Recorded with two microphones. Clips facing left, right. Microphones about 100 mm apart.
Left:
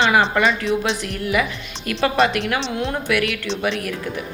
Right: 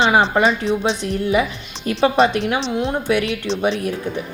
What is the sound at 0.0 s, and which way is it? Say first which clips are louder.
A woman's voice: right 2 dB; 30° right (ahead or behind).